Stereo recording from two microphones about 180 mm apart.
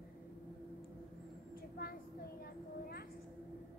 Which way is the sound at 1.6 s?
55° left (ahead or behind).